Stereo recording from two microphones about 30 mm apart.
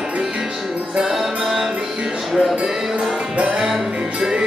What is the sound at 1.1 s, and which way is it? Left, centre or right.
Music, centre.